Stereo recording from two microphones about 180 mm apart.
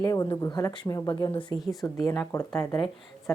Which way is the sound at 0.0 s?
20° left (ahead or behind).